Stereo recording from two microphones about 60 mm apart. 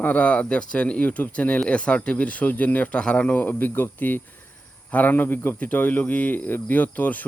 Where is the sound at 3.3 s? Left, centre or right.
Left.